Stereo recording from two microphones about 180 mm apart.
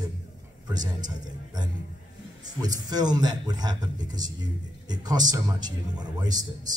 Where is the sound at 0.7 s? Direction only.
20° right (ahead or behind).